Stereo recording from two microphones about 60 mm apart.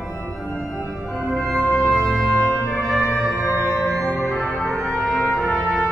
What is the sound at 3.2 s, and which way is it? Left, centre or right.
Music, centre.